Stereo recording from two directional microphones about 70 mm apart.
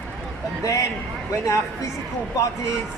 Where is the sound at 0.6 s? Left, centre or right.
Left.